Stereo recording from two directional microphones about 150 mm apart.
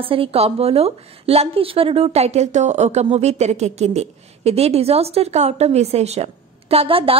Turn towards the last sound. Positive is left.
turn(degrees=-40)  # may be behind; listen again after turning